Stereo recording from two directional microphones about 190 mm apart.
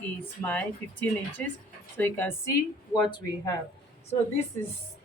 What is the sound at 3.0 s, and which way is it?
Speech, 25° left (ahead or behind).